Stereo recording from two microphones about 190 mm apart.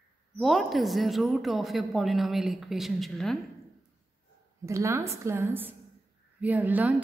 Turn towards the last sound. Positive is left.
turn(degrees=-10)  # may be behind; listen again after turning